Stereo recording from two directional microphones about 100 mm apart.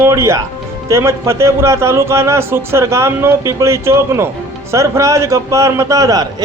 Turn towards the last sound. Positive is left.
turn(degrees=-35)  # may be behind; listen again after turning